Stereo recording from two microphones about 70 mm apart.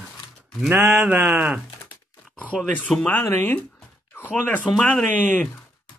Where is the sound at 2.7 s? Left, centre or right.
Left.